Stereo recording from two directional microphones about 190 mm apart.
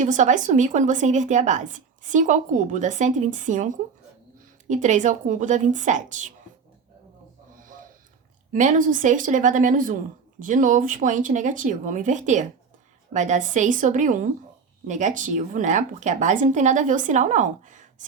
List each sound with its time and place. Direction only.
0.0 s a woman's voice: 40° right (ahead or behind)
7.6 s a sound: 45° right (ahead or behind)
8.5 s a woman's voice: 40° right (ahead or behind)